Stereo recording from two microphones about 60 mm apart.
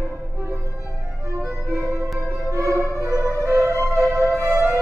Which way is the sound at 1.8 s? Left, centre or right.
Right.